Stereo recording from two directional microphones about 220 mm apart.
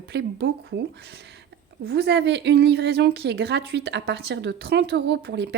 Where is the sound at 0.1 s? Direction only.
55° right (ahead or behind).